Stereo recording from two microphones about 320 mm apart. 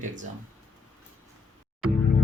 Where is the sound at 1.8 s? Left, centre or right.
Right.